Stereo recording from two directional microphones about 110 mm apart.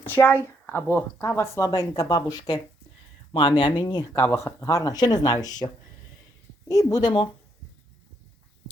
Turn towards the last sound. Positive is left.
turn(degrees=45)  # may be behind; listen again after turning